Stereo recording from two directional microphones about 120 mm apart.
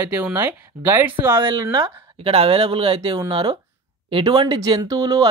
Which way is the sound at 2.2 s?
55° right (ahead or behind).